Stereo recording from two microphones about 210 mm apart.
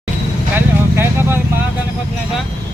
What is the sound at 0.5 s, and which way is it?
Vehicle, 10° right (ahead or behind).